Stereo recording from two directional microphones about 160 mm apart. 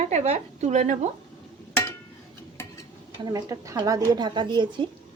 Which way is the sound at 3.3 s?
25° right (ahead or behind).